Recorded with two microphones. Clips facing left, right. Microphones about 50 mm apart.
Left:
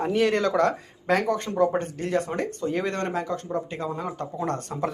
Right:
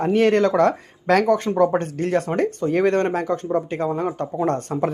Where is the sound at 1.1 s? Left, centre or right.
Right.